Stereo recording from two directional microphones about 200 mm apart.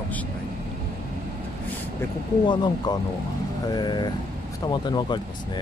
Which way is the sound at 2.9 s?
20° left (ahead or behind).